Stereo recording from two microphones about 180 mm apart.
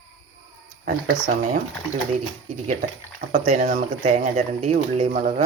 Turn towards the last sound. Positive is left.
turn(degrees=-40)  # may be behind; listen again after turning